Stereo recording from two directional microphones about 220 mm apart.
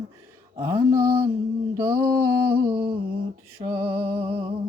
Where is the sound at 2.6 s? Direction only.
25° right (ahead or behind).